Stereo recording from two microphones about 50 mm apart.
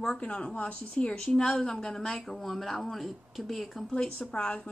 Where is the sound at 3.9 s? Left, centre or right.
Centre.